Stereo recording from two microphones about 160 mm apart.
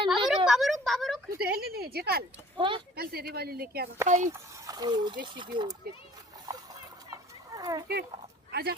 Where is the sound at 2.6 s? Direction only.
30° right (ahead or behind).